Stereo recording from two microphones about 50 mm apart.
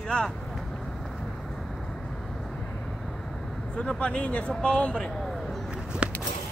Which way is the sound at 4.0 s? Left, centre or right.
Left.